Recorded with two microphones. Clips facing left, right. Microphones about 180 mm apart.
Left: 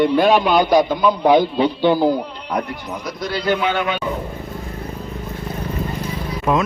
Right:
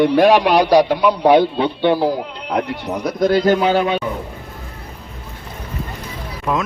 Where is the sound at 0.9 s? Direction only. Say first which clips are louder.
Right 2 dB; 70° right (ahead or behind); by 4.0 s 35° right (ahead or behind).